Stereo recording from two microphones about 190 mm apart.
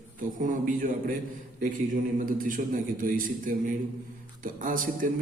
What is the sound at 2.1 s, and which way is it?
A man's voice, 45° right (ahead or behind).